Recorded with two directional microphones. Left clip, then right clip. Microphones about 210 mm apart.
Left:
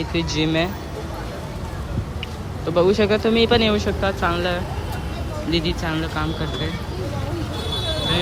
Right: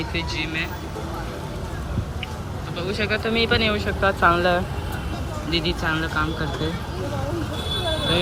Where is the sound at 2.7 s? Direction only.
25° left (ahead or behind); by 6.5 s 5° left (ahead or behind).